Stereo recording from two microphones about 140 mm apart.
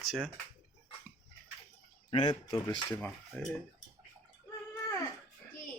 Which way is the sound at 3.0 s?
10° left (ahead or behind).